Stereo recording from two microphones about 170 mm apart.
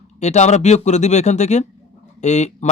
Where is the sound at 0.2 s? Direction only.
40° left (ahead or behind).